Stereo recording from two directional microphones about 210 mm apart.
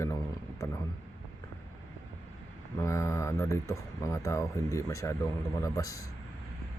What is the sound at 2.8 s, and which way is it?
Speech, 15° left (ahead or behind).